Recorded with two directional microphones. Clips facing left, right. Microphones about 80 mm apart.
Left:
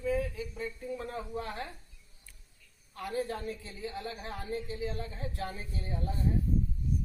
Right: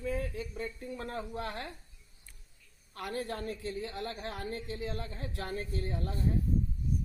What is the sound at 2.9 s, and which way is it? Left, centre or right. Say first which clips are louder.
A woman's voice: left 2 dB; right.